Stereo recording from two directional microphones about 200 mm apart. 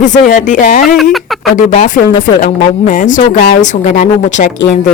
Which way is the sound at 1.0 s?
Centre (ahead or behind).